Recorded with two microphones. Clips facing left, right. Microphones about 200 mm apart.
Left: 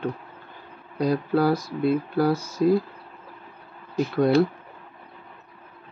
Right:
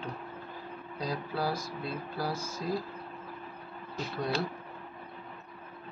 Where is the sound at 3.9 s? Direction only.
60° left (ahead or behind).